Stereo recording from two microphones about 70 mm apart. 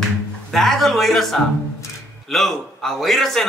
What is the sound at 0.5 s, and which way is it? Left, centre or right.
A man's voice, centre.